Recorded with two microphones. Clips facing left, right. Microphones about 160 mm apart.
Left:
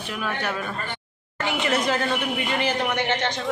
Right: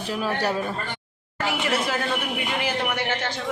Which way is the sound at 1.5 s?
5° right (ahead or behind).